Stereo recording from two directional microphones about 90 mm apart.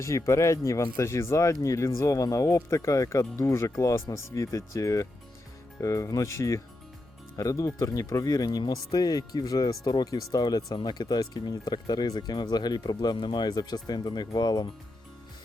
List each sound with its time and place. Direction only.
0.0 s speech: 35° left (ahead or behind); by 14.7 s 50° left (ahead or behind)